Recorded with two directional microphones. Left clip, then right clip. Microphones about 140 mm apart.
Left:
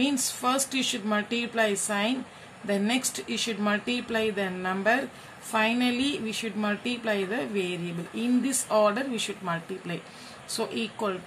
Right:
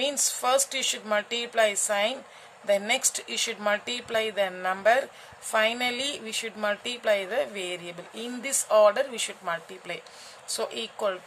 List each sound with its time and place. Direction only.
0.0 s speech: 50° right (ahead or behind)